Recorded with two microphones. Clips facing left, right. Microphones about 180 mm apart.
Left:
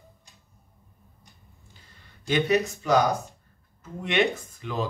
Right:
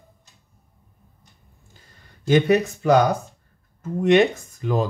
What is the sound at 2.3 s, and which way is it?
Speech, 50° right (ahead or behind).